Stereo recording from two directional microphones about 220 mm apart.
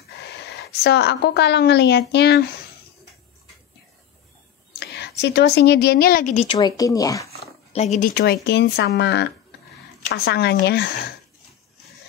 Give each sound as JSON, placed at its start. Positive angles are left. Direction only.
{"t": 0.5, "sound": "speech", "side_deg": 45}
{"t": 4.7, "sound": "speech", "side_deg": 50}
{"t": 7.7, "sound": "speech", "side_deg": 30}
{"t": 8.1, "sound": "speech", "side_deg": 50}